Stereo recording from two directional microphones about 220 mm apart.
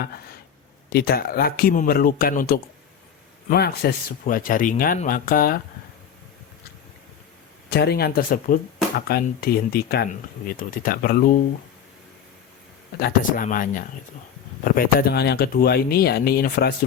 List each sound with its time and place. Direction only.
0.9 s speech: 45° left (ahead or behind)
7.7 s speech: 45° left (ahead or behind)
13.0 s speech: 40° left (ahead or behind)